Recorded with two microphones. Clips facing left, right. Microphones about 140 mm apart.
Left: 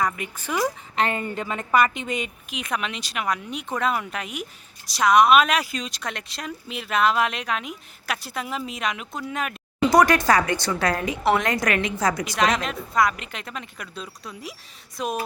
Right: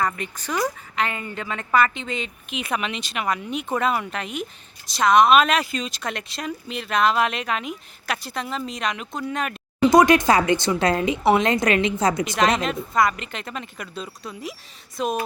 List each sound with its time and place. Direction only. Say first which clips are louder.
0.0 s a woman's voice: right 1 dB; 10° left (ahead or behind)
0.9 s a woman's voice: left 3 dB; 30° left (ahead or behind)
1.4 s a woman's voice: right 1 dB; 10° left (ahead or behind)
2.5 s speech: right 4 dB; 5° right (ahead or behind)
9.9 s speech: right 2 dB; 20° right (ahead or behind)
12.4 s speech: right 1 dB; centre (ahead or behind)